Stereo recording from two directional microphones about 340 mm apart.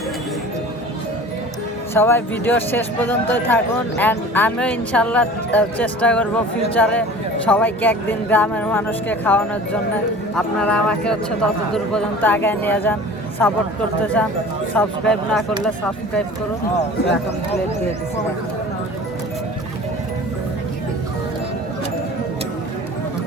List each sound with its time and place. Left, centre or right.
1.9 s speech: centre
16.7 s speech: left